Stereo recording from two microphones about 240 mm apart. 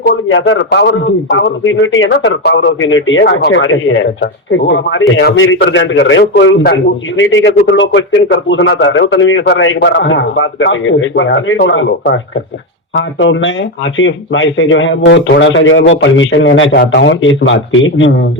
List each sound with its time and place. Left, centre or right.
0.0 s a man's voice: left
7.8 s a man's voice: left